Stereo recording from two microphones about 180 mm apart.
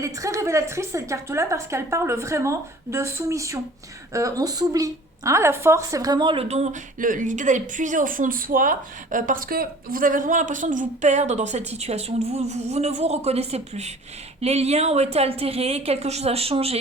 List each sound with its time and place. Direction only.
0.0 s a woman's voice: 15° right (ahead or behind); by 16.7 s 35° right (ahead or behind)